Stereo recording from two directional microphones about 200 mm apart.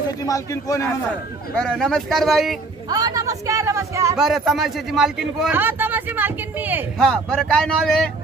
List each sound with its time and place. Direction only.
0.3 s a man's voice: 15° left (ahead or behind)
1.8 s speech: centre (ahead or behind)
2.9 s a man's voice: 20° right (ahead or behind)
4.2 s a man's voice: centre (ahead or behind)
7.0 s speech: 5° left (ahead or behind)